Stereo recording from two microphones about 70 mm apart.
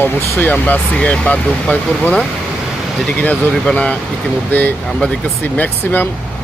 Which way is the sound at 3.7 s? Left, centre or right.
Centre.